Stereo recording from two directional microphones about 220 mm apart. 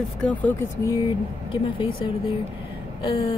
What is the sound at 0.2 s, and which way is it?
Speech, 5° left (ahead or behind).